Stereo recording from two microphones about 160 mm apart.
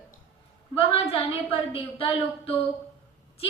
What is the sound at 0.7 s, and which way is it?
A woman's voice, 35° left (ahead or behind).